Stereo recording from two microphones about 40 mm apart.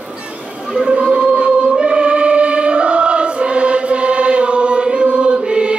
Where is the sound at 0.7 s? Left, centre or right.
Right.